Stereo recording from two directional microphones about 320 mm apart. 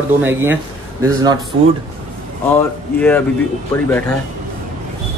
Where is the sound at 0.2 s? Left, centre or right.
Centre.